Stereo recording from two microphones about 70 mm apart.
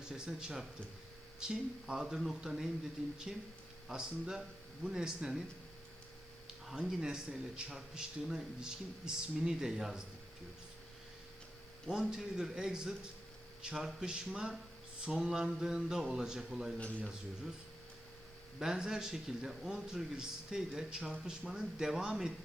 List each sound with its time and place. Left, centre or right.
0.0 s a man's voice: centre
6.7 s a man's voice: centre
11.9 s a man's voice: centre
16.7 s speech: centre
18.6 s a man's voice: centre